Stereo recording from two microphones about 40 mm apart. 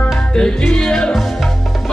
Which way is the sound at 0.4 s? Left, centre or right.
Centre.